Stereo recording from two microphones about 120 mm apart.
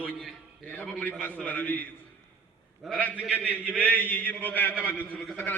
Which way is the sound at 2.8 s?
Centre (ahead or behind).